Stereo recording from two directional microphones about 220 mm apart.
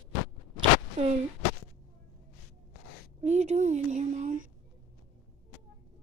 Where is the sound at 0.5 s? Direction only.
25° right (ahead or behind).